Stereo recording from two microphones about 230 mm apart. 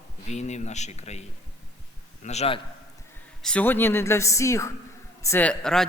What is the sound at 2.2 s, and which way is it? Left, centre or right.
Speech, left.